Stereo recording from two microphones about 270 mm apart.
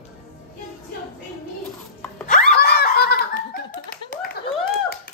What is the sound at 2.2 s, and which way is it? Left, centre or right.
Laughter, left.